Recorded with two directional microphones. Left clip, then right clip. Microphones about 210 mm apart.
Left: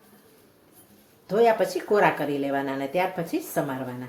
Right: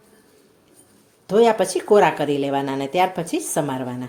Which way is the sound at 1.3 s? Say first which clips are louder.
Right 4 dB; 40° right (ahead or behind).